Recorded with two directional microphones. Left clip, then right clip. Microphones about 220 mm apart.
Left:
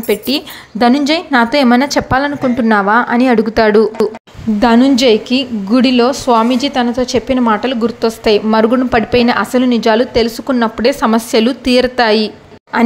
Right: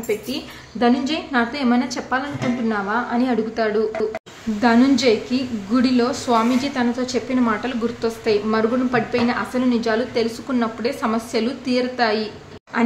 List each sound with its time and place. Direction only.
0.1 s a woman's voice: 45° left (ahead or behind)